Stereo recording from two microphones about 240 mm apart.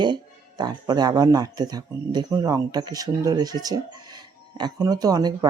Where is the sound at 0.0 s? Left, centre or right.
Centre.